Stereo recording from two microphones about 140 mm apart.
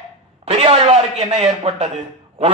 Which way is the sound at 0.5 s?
50° right (ahead or behind).